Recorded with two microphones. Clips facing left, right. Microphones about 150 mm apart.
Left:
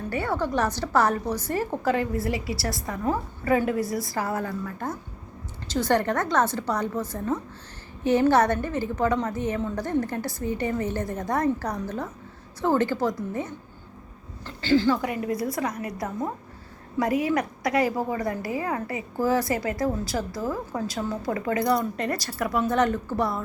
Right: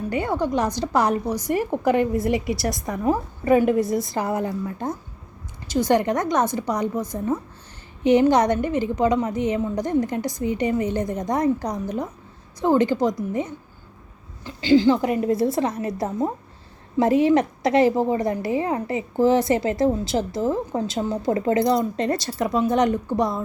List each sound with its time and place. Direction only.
0.1 s a woman's voice: 15° right (ahead or behind)